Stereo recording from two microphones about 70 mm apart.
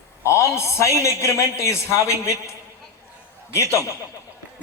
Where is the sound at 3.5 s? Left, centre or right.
Left.